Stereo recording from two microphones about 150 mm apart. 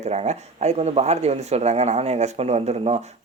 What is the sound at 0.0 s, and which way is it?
Speech, 50° right (ahead or behind).